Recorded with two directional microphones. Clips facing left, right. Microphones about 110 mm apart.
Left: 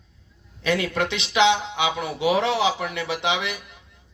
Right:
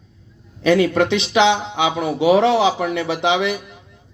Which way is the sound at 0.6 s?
25° right (ahead or behind).